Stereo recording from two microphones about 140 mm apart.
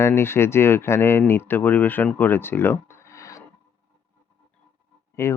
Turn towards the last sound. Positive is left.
turn(degrees=20)  # may be behind; listen again after turning